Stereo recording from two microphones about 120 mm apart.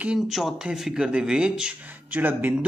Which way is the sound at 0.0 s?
5° right (ahead or behind).